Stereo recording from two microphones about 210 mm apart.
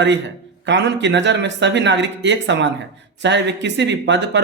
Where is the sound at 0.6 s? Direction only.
55° right (ahead or behind).